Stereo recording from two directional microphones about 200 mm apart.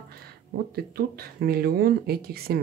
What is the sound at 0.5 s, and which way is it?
Speech, 50° right (ahead or behind).